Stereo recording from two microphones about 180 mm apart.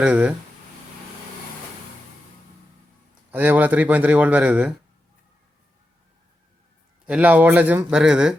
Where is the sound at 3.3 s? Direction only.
10° right (ahead or behind).